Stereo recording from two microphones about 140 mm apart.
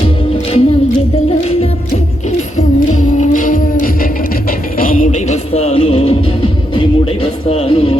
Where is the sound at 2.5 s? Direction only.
65° left (ahead or behind).